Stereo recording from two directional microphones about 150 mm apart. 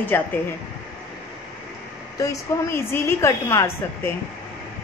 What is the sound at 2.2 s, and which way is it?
A woman's voice, 20° left (ahead or behind).